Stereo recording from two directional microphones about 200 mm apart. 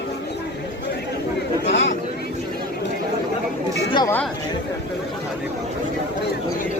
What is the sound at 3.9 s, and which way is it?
Speech, 15° left (ahead or behind).